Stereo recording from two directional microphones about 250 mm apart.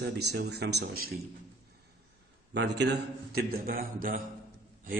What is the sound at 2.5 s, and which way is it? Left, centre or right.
A man's voice, right.